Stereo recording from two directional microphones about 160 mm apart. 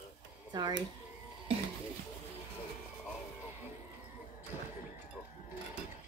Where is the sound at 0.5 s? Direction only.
25° right (ahead or behind).